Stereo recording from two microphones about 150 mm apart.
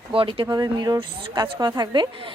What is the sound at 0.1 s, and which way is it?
A woman's voice, 35° right (ahead or behind).